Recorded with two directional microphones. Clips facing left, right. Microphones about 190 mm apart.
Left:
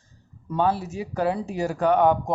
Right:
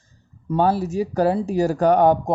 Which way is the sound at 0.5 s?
40° right (ahead or behind).